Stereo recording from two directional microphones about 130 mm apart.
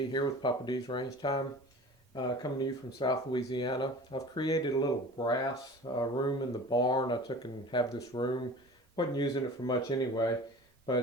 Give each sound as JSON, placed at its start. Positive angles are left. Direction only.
{"t": 0.1, "sound": "speech", "side_deg": 35}